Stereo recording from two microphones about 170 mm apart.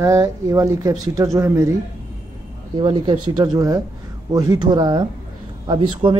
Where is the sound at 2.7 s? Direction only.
25° right (ahead or behind).